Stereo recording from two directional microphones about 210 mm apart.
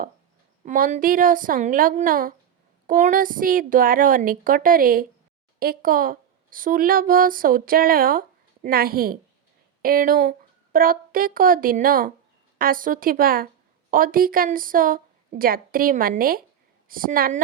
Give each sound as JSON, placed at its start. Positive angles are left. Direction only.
{"t": 0.6, "sound": "a woman's voice", "side_deg": -40}